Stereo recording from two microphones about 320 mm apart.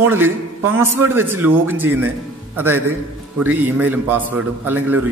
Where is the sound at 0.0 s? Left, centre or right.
Centre.